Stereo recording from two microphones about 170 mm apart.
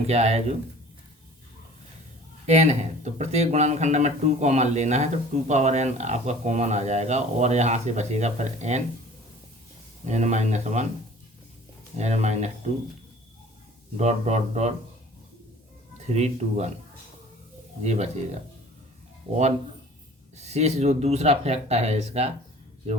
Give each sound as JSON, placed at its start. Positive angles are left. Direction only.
{"t": 0.1, "sound": "speech", "side_deg": -40}
{"t": 2.5, "sound": "speech", "side_deg": -40}
{"t": 10.1, "sound": "speech", "side_deg": -40}
{"t": 11.9, "sound": "speech", "side_deg": -40}
{"t": 13.9, "sound": "speech", "side_deg": -40}
{"t": 16.1, "sound": "speech", "side_deg": -40}
{"t": 17.8, "sound": "speech", "side_deg": -40}
{"t": 19.3, "sound": "speech", "side_deg": -35}